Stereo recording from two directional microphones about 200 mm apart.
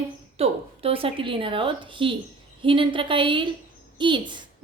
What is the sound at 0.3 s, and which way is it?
A woman's voice, 30° right (ahead or behind).